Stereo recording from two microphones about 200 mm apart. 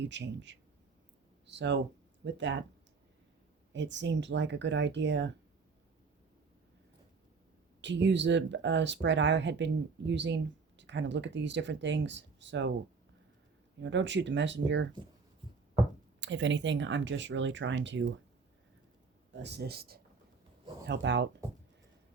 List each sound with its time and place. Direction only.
0.0 s speech: 60° right (ahead or behind)
3.7 s speech: 65° right (ahead or behind)
7.8 s speech: 65° right (ahead or behind)
13.8 s speech: 65° right (ahead or behind)
16.2 s speech: 65° right (ahead or behind)
19.4 s speech: 55° right (ahead or behind)